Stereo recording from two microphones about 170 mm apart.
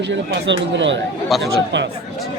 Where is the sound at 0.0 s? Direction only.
90° right.